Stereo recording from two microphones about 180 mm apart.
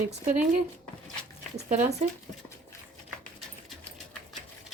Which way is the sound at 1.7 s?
40° right (ahead or behind).